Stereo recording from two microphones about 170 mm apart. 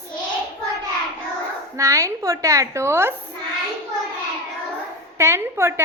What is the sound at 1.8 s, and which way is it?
A woman's voice, 20° right (ahead or behind).